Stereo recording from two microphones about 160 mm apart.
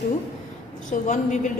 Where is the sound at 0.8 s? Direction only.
55° left (ahead or behind).